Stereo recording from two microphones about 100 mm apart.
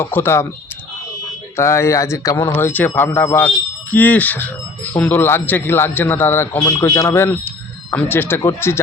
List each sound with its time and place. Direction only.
0.0 s speech: 25° left (ahead or behind)
1.5 s speech: 30° left (ahead or behind)
2.6 s speech: 20° left (ahead or behind)
6.6 s speech: 30° left (ahead or behind)